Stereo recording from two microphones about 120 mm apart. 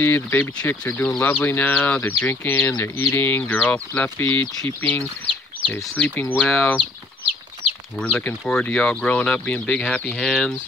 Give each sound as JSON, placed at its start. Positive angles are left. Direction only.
{"t": 0.0, "sound": "speech", "side_deg": 15}
{"t": 8.0, "sound": "speech", "side_deg": 10}